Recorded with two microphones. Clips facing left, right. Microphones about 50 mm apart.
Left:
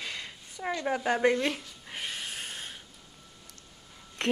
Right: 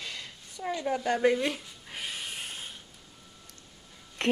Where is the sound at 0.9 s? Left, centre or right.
Centre.